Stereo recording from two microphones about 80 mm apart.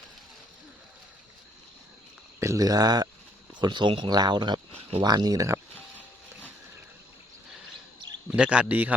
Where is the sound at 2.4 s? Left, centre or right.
Right.